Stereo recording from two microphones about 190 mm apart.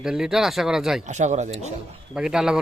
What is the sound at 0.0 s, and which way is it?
Speech, 5° right (ahead or behind).